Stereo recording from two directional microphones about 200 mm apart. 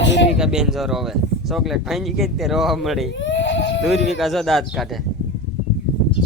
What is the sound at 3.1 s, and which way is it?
Sheep, 65° left (ahead or behind).